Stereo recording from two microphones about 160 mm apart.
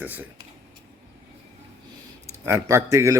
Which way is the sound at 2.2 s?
15° right (ahead or behind).